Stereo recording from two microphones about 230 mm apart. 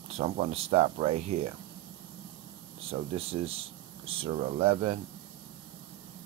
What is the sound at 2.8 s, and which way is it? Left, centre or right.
Speech, right.